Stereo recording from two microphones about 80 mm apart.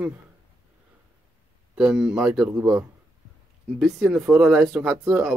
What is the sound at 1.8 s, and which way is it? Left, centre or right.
Speech, centre.